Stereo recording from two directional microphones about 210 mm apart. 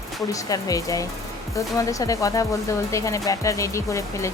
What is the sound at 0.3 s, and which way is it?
A woman's voice, 15° left (ahead or behind).